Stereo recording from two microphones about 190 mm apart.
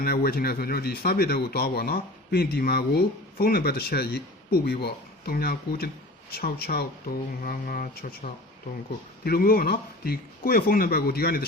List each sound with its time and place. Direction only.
0.0 s speech: 50° left (ahead or behind)